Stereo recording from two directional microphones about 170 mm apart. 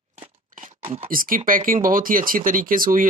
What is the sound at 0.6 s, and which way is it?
Speech, 45° right (ahead or behind).